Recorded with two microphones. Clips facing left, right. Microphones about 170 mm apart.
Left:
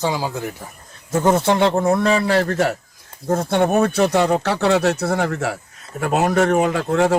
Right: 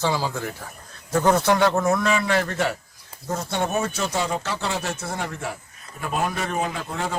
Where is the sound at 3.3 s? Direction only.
55° left (ahead or behind); by 7.1 s 70° left (ahead or behind).